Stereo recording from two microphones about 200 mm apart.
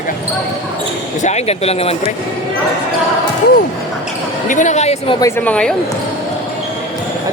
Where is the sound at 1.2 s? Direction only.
35° left (ahead or behind).